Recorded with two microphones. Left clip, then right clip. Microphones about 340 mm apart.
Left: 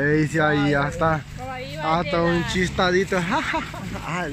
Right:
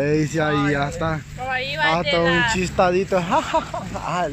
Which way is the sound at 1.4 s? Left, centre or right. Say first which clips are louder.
Right 8 dB; right.